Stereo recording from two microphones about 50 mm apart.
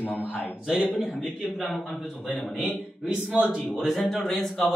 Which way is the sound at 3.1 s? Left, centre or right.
Right.